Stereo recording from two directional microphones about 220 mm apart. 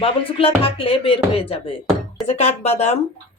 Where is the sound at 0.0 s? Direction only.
25° left (ahead or behind).